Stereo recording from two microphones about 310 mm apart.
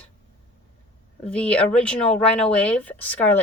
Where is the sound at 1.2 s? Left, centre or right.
Centre.